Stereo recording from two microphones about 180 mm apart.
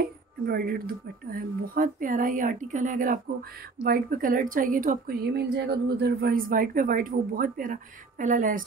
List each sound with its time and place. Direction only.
0.5 s a woman's voice: 55° right (ahead or behind)